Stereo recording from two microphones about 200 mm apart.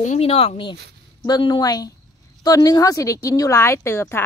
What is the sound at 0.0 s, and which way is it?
A woman's voice, 35° left (ahead or behind).